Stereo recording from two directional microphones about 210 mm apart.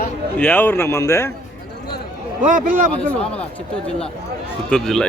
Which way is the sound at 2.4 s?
40° right (ahead or behind).